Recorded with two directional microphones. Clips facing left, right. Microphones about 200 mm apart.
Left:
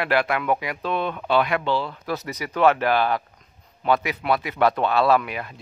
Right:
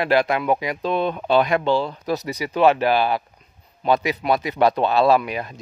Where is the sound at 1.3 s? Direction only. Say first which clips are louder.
Right 3 dB; 35° right (ahead or behind).